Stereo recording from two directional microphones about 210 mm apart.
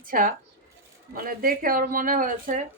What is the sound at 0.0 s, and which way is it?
Speech, 40° right (ahead or behind).